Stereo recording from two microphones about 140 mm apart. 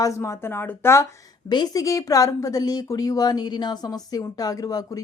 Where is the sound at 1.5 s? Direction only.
30° left (ahead or behind).